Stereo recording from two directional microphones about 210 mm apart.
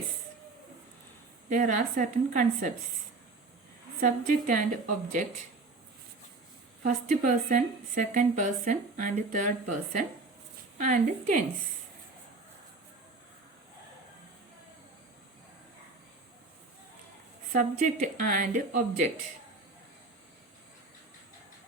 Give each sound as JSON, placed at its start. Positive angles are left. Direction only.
{"t": 1.5, "sound": "a woman's voice", "side_deg": -35}
{"t": 4.0, "sound": "a woman's voice", "side_deg": -40}
{"t": 6.8, "sound": "a woman's voice", "side_deg": -35}
{"t": 17.5, "sound": "a woman's voice", "side_deg": -35}